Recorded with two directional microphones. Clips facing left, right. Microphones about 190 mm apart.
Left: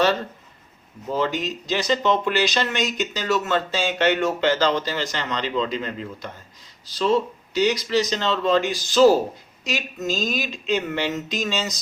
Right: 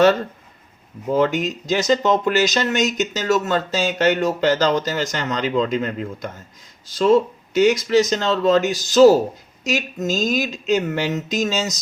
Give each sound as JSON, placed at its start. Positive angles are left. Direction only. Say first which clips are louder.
{"t": 1.1, "sound": "speech", "louder": "right 5 dB", "side_deg": -50}